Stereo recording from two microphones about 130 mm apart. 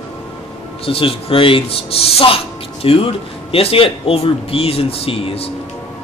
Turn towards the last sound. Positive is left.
turn(degrees=45)  # may be behind; listen again after turning